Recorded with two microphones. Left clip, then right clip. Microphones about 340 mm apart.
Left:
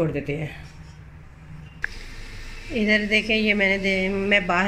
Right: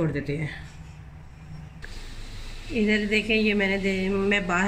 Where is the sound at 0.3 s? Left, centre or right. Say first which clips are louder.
Left 2 dB; centre.